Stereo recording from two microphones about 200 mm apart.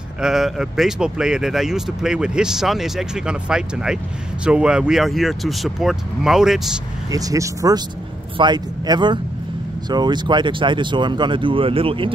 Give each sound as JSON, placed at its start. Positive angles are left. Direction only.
{"t": 0.2, "sound": "speech", "side_deg": 0}
{"t": 7.1, "sound": "speech", "side_deg": -15}